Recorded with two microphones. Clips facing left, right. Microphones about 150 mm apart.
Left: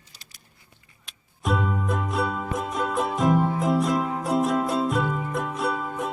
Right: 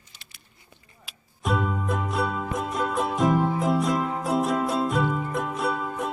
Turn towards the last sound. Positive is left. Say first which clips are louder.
# even
turn(degrees=0)  # may be behind; listen again after turning